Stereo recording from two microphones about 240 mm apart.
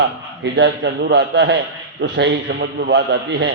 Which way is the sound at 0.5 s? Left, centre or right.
Right.